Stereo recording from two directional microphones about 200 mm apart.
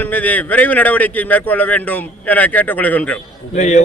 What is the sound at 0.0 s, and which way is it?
A man's voice, 10° left (ahead or behind).